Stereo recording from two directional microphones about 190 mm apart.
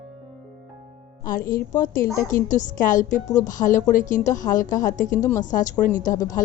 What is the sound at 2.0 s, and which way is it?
Speech, 15° left (ahead or behind).